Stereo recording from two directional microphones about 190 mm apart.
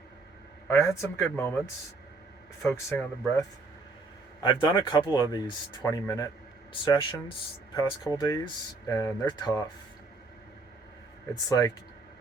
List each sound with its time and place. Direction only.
0.7 s speech: 15° left (ahead or behind)
2.6 s speech: 15° left (ahead or behind)
4.4 s speech: 25° left (ahead or behind)
11.4 s speech: 20° left (ahead or behind)